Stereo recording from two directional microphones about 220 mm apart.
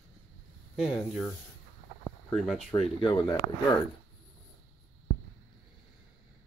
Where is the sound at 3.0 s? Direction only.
20° left (ahead or behind).